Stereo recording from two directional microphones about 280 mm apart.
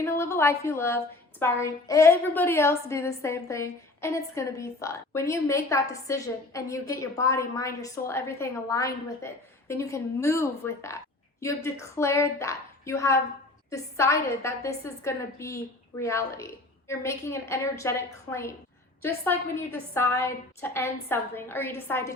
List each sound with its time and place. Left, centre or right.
0.0 s a woman's voice: centre